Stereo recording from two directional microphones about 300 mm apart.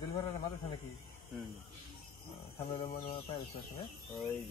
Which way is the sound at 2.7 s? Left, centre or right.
Centre.